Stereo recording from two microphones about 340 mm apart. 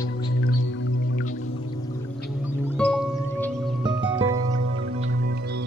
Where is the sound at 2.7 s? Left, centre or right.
Centre.